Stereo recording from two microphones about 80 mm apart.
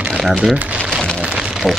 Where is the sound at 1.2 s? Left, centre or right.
Centre.